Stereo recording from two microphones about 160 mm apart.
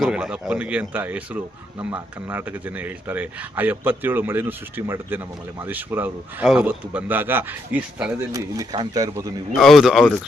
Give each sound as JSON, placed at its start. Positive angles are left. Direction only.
{"t": 0.0, "sound": "a man's voice", "side_deg": -5}
{"t": 8.3, "sound": "speech", "side_deg": -25}
{"t": 9.6, "sound": "speech", "side_deg": 0}